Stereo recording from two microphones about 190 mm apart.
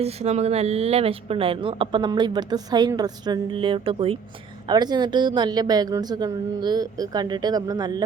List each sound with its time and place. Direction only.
0.0 s a woman's voice: 35° right (ahead or behind)